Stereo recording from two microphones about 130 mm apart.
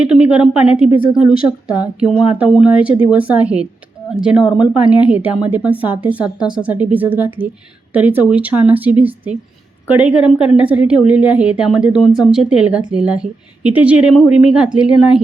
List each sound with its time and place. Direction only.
0.0 s speech: 5° right (ahead or behind)
1.6 s a woman's voice: 30° left (ahead or behind)
2.0 s speech: 5° right (ahead or behind)